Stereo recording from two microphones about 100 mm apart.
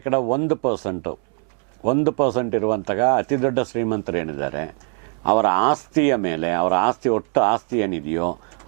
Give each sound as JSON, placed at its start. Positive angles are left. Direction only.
{"t": 0.0, "sound": "speech", "side_deg": -15}